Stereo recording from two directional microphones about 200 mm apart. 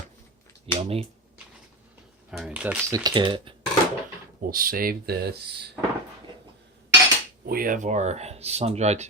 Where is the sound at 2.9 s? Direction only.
20° right (ahead or behind).